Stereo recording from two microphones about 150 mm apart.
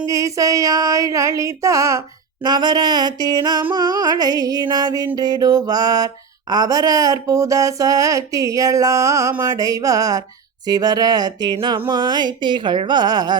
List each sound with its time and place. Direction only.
0.1 s speech: 20° right (ahead or behind)